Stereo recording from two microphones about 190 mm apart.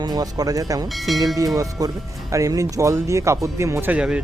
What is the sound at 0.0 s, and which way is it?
Speech, 20° right (ahead or behind).